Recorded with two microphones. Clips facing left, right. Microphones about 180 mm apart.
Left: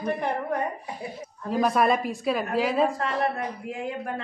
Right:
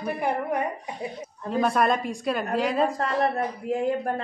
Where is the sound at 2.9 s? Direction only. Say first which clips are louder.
Right 2 dB; 40° right (ahead or behind).